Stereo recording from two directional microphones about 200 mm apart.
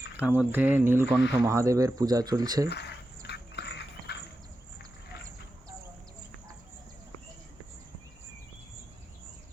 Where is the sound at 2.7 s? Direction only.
55° left (ahead or behind).